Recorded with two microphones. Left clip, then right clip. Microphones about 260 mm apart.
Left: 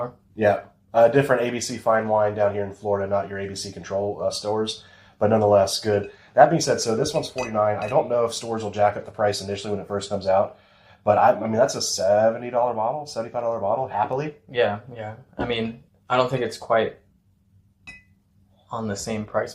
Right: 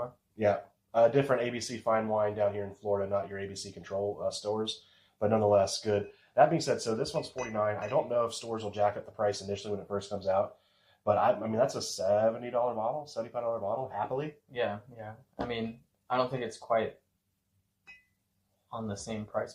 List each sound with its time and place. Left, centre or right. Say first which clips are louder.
0.3 s speech: left 8 dB; left
14.5 s speech: left 12 dB; left
18.7 s speech: left 10 dB; centre